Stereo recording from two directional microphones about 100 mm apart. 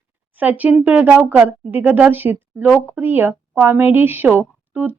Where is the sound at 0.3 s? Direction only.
15° right (ahead or behind).